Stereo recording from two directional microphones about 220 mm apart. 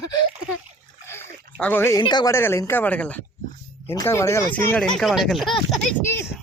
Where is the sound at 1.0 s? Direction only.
10° left (ahead or behind).